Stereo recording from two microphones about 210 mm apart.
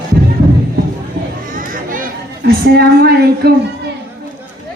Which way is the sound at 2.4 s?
50° right (ahead or behind).